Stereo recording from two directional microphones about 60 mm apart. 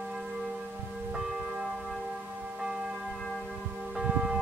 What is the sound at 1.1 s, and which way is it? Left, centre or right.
Church bell, centre.